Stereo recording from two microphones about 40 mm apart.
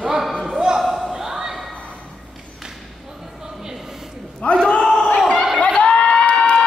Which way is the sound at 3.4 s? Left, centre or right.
Centre.